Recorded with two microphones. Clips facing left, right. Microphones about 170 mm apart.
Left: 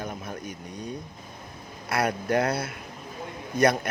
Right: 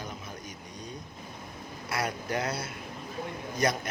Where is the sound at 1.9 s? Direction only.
60° left (ahead or behind).